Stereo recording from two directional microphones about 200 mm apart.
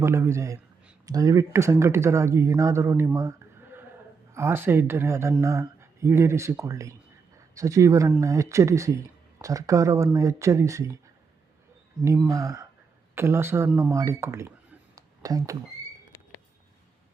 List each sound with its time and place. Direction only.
0.0 s speech: 15° right (ahead or behind)
12.0 s speech: 15° right (ahead or behind)
14.9 s a sound: 20° right (ahead or behind)